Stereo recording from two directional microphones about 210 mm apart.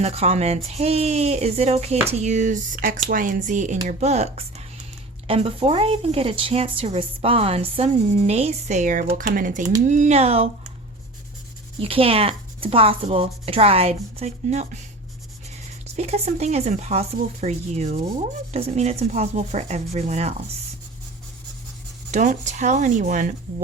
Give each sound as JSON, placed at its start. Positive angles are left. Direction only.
{"t": 0.0, "sound": "speech", "side_deg": -30}
{"t": 11.8, "sound": "speech", "side_deg": -25}
{"t": 16.0, "sound": "speech", "side_deg": -30}
{"t": 22.1, "sound": "speech", "side_deg": -35}